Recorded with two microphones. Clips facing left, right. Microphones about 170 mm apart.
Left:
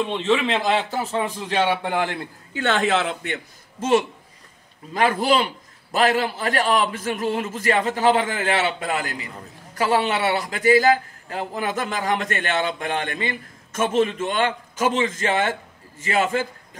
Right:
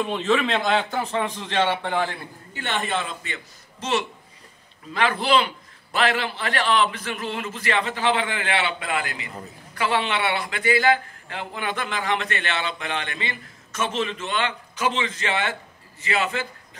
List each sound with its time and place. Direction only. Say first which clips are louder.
0.0 s a man's voice: left 1 dB; centre (ahead or behind)
2.6 s speech: left 6 dB; 90° left; by 3.3 s 65° left (ahead or behind)
4.9 s a man's voice: left 2 dB; 40° left (ahead or behind)